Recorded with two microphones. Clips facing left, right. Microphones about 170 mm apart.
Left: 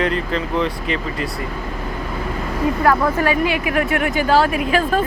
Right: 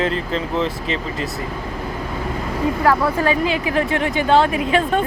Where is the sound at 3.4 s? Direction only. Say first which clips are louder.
Even; 30° right (ahead or behind).